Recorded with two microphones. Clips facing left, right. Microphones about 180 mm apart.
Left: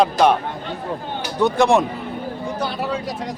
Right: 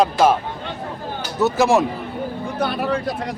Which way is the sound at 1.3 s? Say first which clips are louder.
Even; 5° right (ahead or behind).